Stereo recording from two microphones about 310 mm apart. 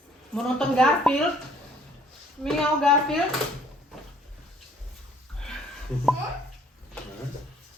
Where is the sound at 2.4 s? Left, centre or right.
Centre.